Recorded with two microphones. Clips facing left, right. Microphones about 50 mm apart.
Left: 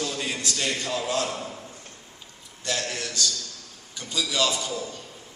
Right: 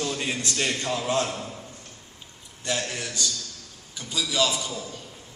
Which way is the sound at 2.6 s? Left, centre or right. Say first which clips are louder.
Even; centre.